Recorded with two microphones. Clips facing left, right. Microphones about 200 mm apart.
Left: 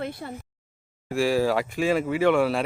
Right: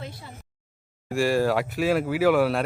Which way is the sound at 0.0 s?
55° left (ahead or behind).